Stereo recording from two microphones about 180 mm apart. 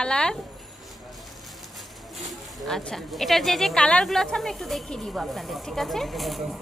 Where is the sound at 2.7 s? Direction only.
Centre (ahead or behind).